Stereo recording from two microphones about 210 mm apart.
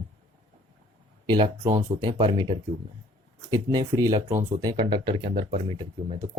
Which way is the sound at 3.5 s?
20° right (ahead or behind).